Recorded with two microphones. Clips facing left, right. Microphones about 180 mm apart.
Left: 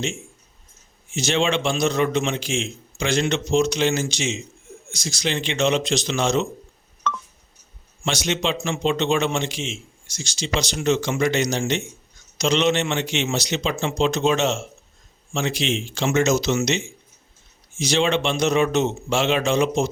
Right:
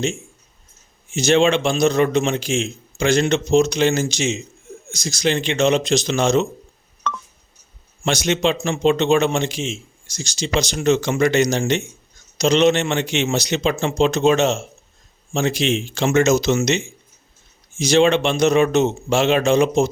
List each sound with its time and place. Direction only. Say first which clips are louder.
1.1 s a man's voice: right 6 dB; 45° right (ahead or behind)
7.1 s telephone dialing: even; 50° right (ahead or behind)
8.0 s a man's voice: right 5 dB; 50° right (ahead or behind)